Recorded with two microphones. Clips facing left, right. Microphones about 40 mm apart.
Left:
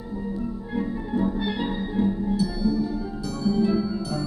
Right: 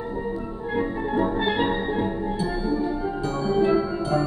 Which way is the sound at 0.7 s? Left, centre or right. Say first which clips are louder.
Right 3 dB; right.